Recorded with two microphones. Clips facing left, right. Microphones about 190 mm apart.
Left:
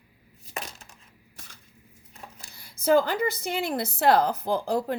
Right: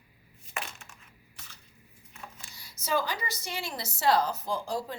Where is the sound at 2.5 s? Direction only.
55° left (ahead or behind).